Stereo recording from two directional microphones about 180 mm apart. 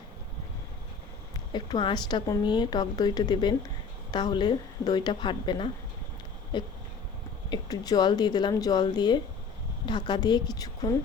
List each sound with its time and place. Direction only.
1.5 s a woman's voice: 25° left (ahead or behind)